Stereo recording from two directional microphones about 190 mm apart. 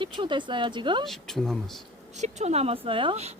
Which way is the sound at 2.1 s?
35° right (ahead or behind).